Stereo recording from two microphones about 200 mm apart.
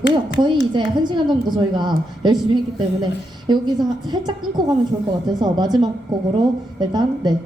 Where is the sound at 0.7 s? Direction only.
20° right (ahead or behind).